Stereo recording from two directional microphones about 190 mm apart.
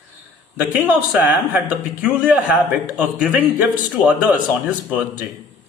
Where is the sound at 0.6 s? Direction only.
10° right (ahead or behind).